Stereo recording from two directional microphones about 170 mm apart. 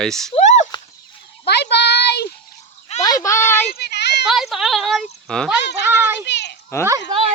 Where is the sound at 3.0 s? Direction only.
20° left (ahead or behind).